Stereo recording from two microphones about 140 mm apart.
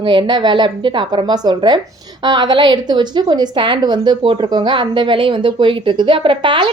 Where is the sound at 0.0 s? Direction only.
35° right (ahead or behind).